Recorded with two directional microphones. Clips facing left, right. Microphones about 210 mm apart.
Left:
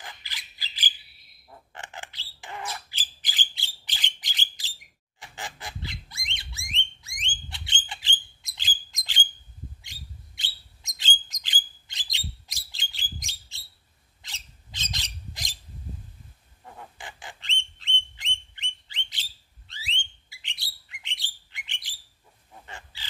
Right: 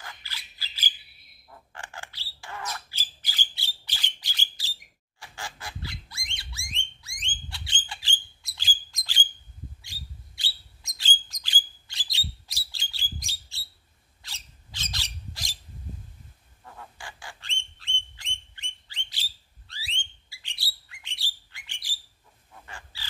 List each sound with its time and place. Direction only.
0.0 s bird: 15° left (ahead or behind)
5.2 s goose: 20° left (ahead or behind)
7.4 s bird: 20° left (ahead or behind)
14.2 s squawk: 20° left (ahead or behind)
16.6 s duck: 20° left (ahead or behind)
19.7 s bird: 20° left (ahead or behind)
22.7 s pig: 20° left (ahead or behind)